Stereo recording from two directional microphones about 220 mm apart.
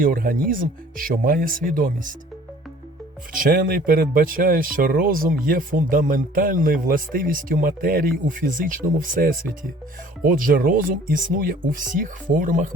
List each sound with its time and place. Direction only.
0.0 s speech: 40° right (ahead or behind)
3.4 s speech: 40° right (ahead or behind)